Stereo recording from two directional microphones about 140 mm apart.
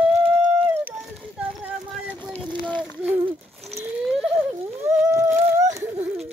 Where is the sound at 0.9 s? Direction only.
Centre (ahead or behind).